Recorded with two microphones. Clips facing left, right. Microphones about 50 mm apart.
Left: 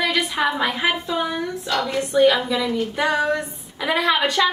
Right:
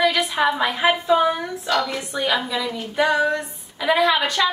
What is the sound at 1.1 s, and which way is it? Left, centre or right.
Speech, centre.